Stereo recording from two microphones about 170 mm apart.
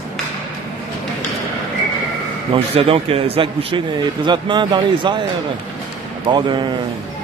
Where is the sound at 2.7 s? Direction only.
35° right (ahead or behind).